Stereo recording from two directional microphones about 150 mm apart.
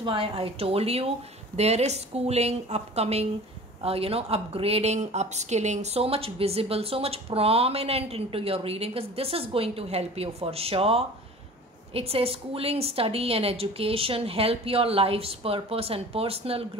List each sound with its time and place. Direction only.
0.0 s speech: 35° right (ahead or behind)